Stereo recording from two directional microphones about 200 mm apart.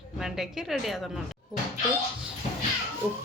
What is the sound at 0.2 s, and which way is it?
Speech, centre (ahead or behind).